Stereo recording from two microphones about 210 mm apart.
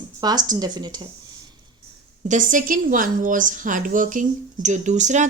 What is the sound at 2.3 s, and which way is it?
A woman's voice, 40° right (ahead or behind).